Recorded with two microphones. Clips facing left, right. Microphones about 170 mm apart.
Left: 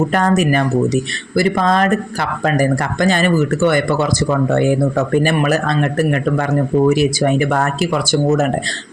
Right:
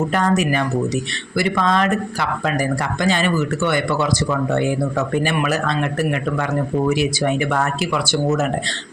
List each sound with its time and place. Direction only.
0.1 s speech: 50° left (ahead or behind)